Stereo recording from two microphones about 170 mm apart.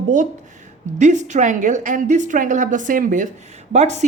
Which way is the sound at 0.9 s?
45° right (ahead or behind).